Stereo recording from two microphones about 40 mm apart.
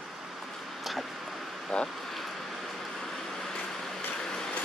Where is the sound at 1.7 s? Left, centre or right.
Left.